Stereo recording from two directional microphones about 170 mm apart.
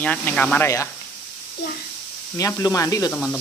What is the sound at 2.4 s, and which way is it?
Speech, 20° left (ahead or behind).